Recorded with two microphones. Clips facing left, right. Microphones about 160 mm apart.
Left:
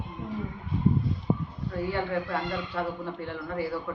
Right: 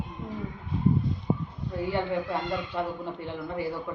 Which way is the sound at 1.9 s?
20° right (ahead or behind).